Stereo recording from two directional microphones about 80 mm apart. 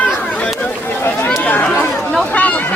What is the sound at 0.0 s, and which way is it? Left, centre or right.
Chatter, centre.